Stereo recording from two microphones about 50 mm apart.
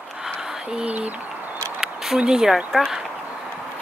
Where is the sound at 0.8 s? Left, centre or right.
Right.